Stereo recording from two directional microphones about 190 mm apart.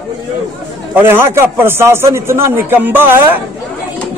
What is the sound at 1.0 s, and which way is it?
A man's voice, 10° right (ahead or behind).